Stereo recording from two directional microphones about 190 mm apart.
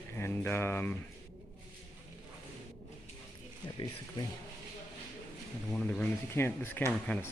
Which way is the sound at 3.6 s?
20° left (ahead or behind).